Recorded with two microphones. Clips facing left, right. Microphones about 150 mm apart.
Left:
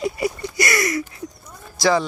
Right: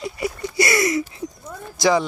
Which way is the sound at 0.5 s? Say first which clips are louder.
Right 6 dB; 25° right (ahead or behind).